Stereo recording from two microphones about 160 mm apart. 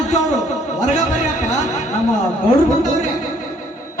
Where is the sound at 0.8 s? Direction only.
50° left (ahead or behind).